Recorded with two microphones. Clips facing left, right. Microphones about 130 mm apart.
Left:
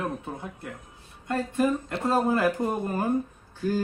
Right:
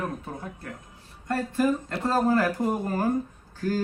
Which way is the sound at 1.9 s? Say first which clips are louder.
Right 1 dB; 15° left (ahead or behind).